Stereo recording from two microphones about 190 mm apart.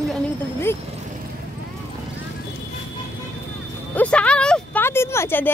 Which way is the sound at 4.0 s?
5° left (ahead or behind).